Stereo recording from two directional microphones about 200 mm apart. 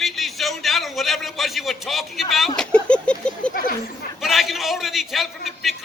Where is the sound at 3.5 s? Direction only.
45° left (ahead or behind).